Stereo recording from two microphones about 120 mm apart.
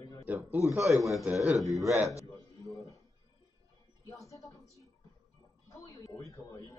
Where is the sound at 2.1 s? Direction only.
25° left (ahead or behind).